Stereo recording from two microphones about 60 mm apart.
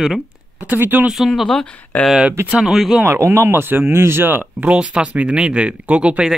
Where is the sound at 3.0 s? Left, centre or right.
Right.